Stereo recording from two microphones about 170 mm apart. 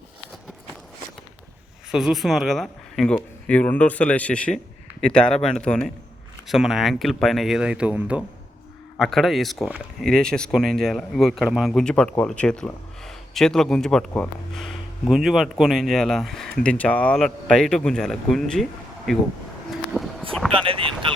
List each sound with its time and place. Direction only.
1.9 s speech: 5° right (ahead or behind)
19.9 s a sound: centre (ahead or behind)
20.5 s speech: 30° right (ahead or behind)